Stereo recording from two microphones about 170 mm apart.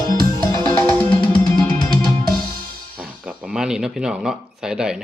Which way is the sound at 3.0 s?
5° right (ahead or behind).